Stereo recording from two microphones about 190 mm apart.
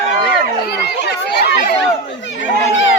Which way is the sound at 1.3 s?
60° left (ahead or behind).